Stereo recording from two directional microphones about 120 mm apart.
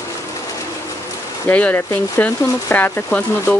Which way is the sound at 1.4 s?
15° left (ahead or behind).